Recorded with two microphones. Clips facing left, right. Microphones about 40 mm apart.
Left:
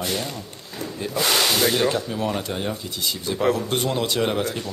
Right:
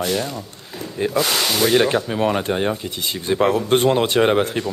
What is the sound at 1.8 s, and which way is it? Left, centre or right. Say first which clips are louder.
Speech: right 5 dB; right.